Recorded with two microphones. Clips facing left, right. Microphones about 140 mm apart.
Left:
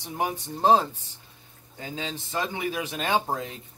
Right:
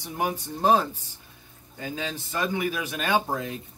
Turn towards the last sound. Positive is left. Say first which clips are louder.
# right 1 dB
turn(degrees=25)  # may be behind; listen again after turning